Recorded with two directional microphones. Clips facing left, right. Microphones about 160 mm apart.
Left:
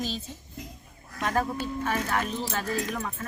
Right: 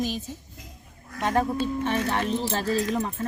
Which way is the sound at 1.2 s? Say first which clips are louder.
Right 3 dB; 25° right (ahead or behind).